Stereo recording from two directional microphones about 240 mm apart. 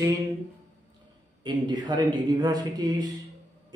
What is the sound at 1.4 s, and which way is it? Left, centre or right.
A man's voice, centre.